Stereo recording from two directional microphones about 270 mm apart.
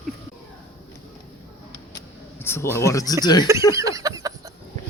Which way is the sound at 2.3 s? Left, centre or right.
Centre.